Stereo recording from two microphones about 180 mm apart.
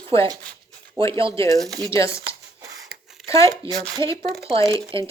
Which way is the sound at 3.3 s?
15° left (ahead or behind).